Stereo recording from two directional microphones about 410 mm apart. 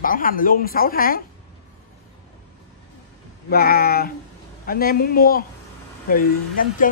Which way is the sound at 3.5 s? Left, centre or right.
Left.